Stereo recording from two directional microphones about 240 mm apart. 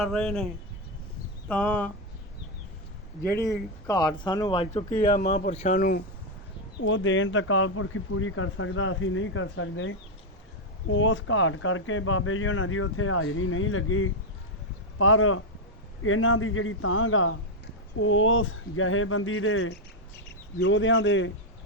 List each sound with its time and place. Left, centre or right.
0.0 s speech: centre
1.5 s speech: centre
3.2 s speech: centre; by 6.0 s left
6.7 s speech: left
20.2 s speech: left